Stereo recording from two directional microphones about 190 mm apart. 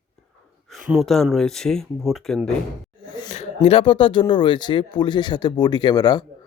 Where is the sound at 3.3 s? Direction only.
35° left (ahead or behind).